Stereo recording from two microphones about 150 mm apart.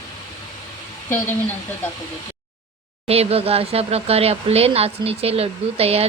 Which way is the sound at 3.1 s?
40° right (ahead or behind).